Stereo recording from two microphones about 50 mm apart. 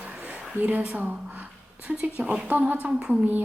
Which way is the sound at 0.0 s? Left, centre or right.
Right.